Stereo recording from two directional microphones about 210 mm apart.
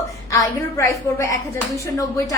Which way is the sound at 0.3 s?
15° left (ahead or behind).